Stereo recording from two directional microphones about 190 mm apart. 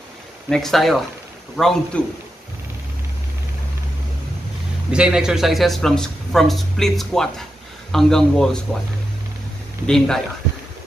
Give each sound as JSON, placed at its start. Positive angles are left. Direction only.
{"t": 0.5, "sound": "a man's voice", "side_deg": 0}
{"t": 4.9, "sound": "a man's voice", "side_deg": -5}